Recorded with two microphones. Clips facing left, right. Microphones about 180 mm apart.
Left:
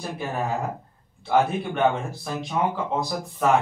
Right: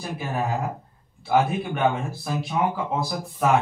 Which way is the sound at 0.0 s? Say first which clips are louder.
Even; centre (ahead or behind).